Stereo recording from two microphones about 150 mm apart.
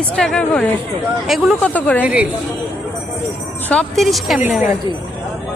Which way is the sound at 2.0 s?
10° right (ahead or behind).